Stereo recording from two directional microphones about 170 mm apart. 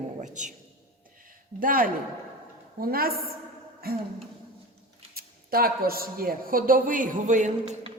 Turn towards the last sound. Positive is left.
turn(degrees=-45)  # may be behind; listen again after turning